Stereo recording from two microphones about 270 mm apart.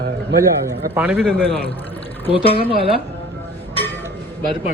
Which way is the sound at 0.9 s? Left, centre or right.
Centre.